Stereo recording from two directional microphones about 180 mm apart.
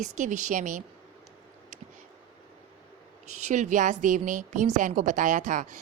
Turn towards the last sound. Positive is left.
turn(degrees=-45)  # may be behind; listen again after turning